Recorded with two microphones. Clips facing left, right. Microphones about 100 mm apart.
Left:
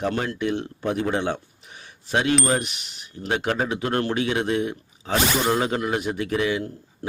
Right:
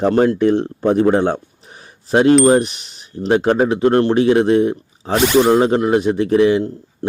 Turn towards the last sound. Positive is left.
turn(degrees=-30)  # may be behind; listen again after turning